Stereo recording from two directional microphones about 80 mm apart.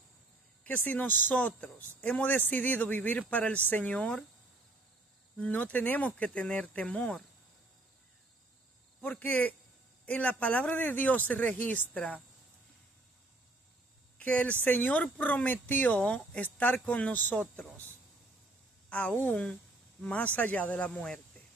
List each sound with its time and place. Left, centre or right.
0.8 s speech: left
5.4 s speech: centre
9.0 s speech: left
14.1 s speech: centre
18.9 s a woman's voice: centre